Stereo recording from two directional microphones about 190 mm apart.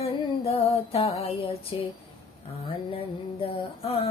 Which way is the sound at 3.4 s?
30° left (ahead or behind).